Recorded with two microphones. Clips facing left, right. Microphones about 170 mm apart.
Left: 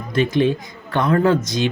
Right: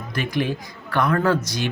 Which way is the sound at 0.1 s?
25° left (ahead or behind).